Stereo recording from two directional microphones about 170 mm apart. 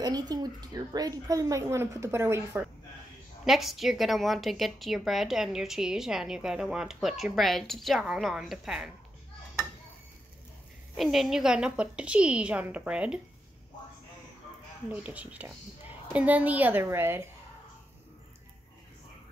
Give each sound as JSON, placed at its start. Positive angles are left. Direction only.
{"t": 0.0, "sound": "speech", "side_deg": -25}
{"t": 3.4, "sound": "a woman's voice", "side_deg": 0}
{"t": 11.0, "sound": "a woman's voice", "side_deg": 0}
{"t": 14.9, "sound": "a woman's voice", "side_deg": -10}